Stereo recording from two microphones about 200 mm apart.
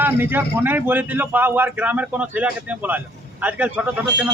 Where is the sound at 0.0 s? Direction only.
10° right (ahead or behind).